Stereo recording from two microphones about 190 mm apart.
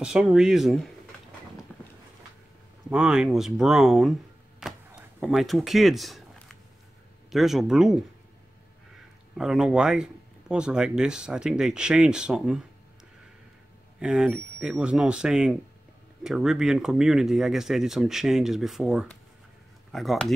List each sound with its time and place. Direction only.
0.0 s speech: 5° right (ahead or behind)
1.7 s boat: 5° left (ahead or behind)
2.9 s speech: 5° right (ahead or behind)
4.6 s a sound: 5° right (ahead or behind)
7.2 s speech: centre (ahead or behind)
9.3 s speech: centre (ahead or behind)
13.9 s speech: 5° right (ahead or behind)